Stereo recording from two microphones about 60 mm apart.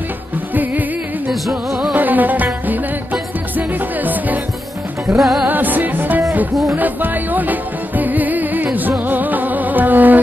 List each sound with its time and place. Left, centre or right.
0.6 s music: right
1.7 s music: centre
2.0 s music: right
5.2 s music: centre
5.5 s music: right